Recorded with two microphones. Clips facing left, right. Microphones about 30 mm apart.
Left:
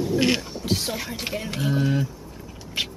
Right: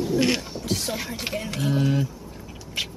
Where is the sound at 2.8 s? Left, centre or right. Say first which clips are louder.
Left 2 dB; centre.